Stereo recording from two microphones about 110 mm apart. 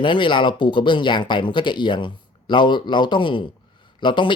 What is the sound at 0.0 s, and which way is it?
Speech, 50° left (ahead or behind).